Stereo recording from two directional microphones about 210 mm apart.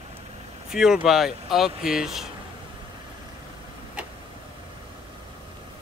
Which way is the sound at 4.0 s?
5° right (ahead or behind).